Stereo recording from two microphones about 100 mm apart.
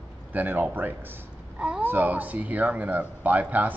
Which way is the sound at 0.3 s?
20° right (ahead or behind).